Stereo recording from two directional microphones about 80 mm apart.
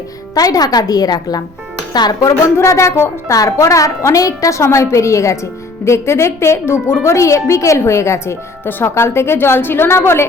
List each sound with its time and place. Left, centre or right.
0.3 s a woman's voice: left
2.4 s a woman's voice: left